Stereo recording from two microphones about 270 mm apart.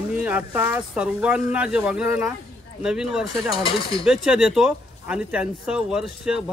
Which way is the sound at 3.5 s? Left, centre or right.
Centre.